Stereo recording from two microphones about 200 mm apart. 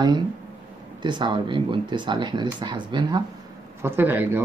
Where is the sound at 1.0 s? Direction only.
25° right (ahead or behind).